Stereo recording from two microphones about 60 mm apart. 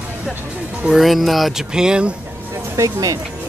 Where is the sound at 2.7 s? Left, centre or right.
Right.